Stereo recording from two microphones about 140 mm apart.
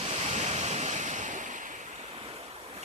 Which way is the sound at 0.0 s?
50° right (ahead or behind).